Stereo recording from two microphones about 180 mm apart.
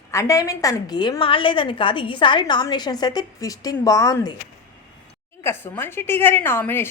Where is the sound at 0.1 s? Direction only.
15° left (ahead or behind).